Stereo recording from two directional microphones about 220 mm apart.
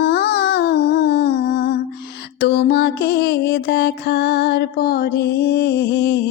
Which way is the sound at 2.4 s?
45° left (ahead or behind).